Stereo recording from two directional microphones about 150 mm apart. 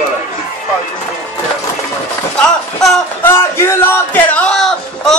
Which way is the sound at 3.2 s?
15° left (ahead or behind).